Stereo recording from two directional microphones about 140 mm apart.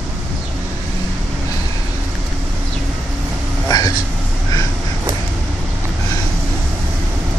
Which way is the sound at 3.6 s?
25° left (ahead or behind).